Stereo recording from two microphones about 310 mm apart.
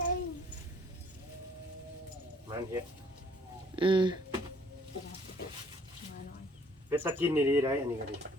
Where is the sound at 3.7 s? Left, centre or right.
Centre.